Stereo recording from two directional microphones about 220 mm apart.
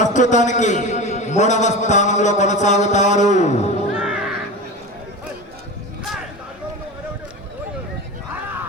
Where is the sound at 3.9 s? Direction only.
5° right (ahead or behind).